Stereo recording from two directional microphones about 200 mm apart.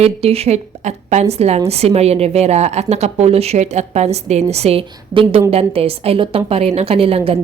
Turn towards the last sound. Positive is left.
turn(degrees=-30)  # may be behind; listen again after turning